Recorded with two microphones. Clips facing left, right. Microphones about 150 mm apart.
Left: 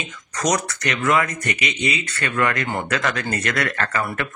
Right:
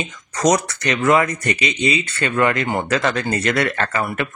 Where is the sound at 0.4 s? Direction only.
30° right (ahead or behind).